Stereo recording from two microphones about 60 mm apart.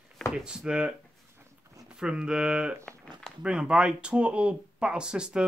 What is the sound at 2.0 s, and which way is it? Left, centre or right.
Speech, centre.